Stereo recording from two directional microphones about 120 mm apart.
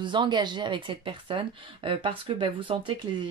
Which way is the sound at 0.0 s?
40° right (ahead or behind).